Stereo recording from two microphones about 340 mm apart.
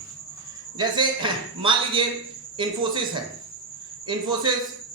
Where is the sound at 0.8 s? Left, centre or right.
Centre.